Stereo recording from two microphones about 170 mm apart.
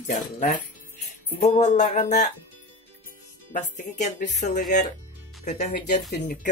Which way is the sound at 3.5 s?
45° left (ahead or behind).